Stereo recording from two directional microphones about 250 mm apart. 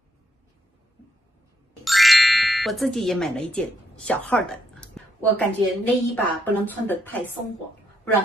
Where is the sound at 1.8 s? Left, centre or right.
Centre.